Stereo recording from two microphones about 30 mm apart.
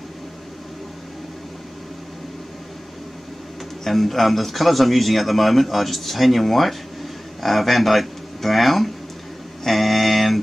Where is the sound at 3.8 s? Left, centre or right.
Centre.